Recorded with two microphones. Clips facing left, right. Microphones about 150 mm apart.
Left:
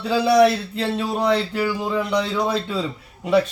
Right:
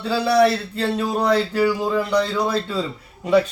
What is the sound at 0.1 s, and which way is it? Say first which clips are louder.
Speech: left 2 dB; 15° left (ahead or behind).